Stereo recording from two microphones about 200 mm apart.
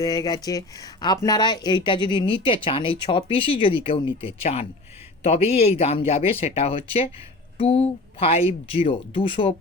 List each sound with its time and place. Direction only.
0.0 s a man's voice: 20° left (ahead or behind)